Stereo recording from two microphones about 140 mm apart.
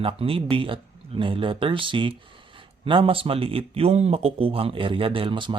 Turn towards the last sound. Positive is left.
turn(degrees=-35)  # may be behind; listen again after turning